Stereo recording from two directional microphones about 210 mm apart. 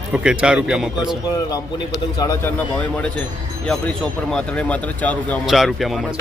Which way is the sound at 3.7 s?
5° left (ahead or behind).